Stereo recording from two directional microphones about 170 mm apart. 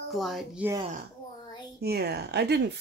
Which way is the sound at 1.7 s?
65° right (ahead or behind).